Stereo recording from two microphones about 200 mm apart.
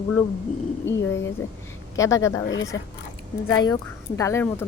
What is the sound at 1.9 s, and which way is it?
Speech, 15° left (ahead or behind).